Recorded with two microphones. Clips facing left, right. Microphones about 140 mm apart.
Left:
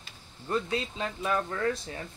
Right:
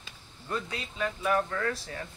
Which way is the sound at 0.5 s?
25° left (ahead or behind).